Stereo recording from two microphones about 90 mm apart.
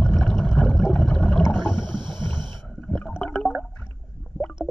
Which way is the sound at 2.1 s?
60° right (ahead or behind).